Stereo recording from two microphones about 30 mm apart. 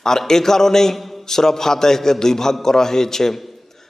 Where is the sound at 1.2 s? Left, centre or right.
Centre.